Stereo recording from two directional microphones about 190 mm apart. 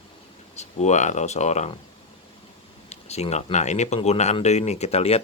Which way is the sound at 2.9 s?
35° left (ahead or behind).